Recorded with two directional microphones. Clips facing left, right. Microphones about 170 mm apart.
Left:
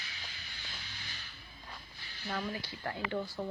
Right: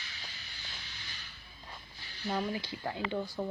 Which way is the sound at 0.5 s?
55° left (ahead or behind).